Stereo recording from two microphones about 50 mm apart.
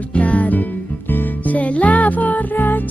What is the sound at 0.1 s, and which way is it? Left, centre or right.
Music, left.